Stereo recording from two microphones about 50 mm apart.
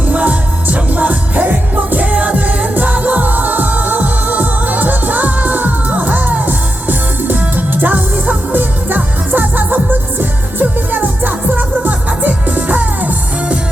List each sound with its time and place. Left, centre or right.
0.0 s music: right